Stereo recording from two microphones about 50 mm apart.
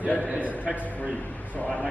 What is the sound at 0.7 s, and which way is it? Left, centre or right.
Speech, right.